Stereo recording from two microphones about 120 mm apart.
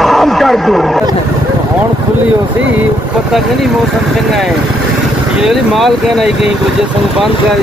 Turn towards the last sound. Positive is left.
turn(degrees=0)  # may be behind; listen again after turning